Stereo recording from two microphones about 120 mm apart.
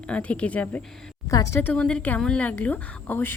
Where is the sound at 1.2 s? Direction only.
25° left (ahead or behind).